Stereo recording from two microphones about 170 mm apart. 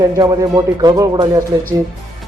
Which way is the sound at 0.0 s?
25° right (ahead or behind).